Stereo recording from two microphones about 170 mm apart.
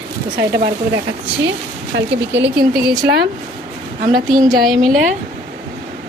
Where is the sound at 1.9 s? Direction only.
80° right.